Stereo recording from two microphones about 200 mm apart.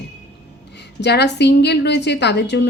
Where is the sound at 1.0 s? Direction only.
55° left (ahead or behind).